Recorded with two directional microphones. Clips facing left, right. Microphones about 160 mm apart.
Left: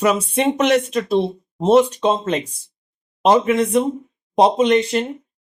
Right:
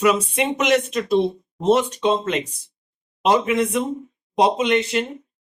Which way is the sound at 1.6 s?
35° left (ahead or behind).